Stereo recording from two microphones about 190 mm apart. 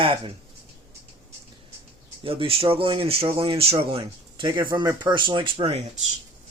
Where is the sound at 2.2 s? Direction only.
30° right (ahead or behind).